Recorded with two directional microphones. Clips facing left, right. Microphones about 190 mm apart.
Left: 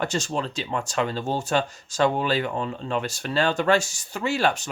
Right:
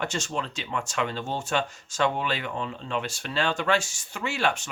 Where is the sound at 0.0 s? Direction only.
35° left (ahead or behind).